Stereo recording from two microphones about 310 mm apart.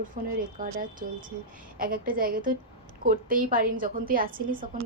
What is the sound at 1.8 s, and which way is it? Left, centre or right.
A woman's voice, right.